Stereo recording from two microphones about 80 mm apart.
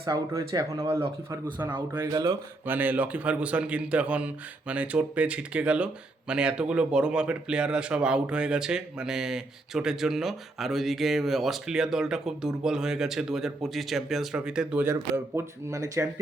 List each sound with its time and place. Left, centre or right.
0.0 s speech: right
1.7 s speech: right; by 14.8 s centre
14.8 s speech: right